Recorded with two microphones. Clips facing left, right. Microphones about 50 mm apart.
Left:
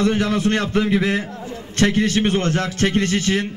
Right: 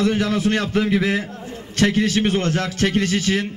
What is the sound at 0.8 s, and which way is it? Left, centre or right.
Speech, centre.